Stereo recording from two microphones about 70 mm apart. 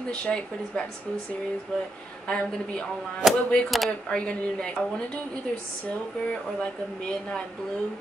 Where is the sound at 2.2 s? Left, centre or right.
Centre.